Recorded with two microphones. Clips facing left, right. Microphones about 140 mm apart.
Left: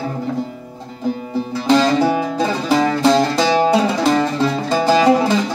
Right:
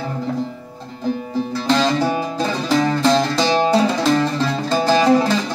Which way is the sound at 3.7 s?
15° left (ahead or behind).